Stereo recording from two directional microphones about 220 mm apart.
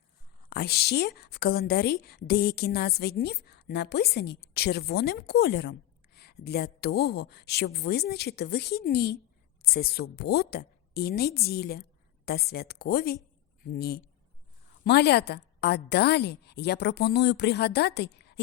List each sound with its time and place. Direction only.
0.5 s a woman's voice: 45° left (ahead or behind)